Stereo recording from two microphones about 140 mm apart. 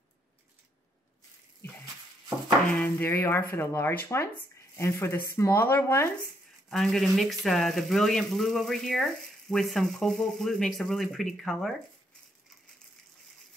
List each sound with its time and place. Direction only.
2.7 s speech: 15° left (ahead or behind)
6.7 s speech: centre (ahead or behind)